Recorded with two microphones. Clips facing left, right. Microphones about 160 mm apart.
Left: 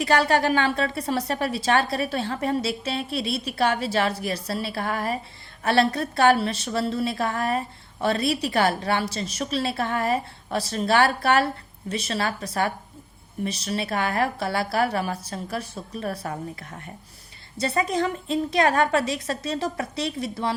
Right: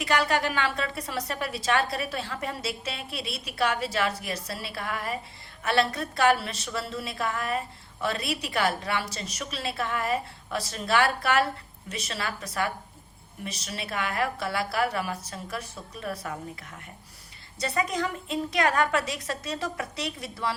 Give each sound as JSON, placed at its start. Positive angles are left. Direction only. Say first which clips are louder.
{"t": 0.0, "sound": "a woman's voice", "louder": "left 5 dB", "side_deg": 35}